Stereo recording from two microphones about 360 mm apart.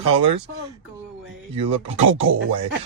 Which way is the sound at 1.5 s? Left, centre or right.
Centre.